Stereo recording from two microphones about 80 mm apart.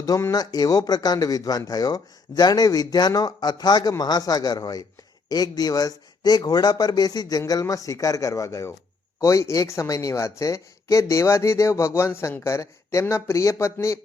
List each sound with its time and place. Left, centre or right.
0.3 s speech: left